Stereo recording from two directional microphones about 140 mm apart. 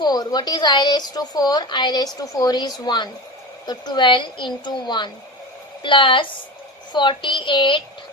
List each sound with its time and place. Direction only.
0.0 s a woman's voice: 30° left (ahead or behind)